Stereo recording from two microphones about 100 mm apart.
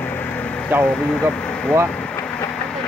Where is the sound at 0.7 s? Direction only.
20° right (ahead or behind).